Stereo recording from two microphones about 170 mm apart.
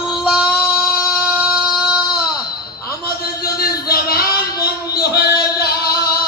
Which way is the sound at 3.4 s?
65° left (ahead or behind).